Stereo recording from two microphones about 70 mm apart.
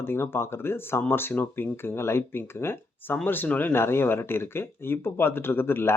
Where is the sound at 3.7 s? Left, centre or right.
Left.